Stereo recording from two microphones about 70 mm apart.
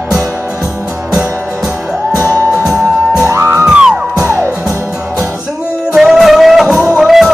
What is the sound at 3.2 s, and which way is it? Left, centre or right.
Music, right.